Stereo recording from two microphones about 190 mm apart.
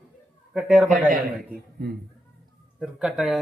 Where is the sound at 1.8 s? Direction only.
55° right (ahead or behind).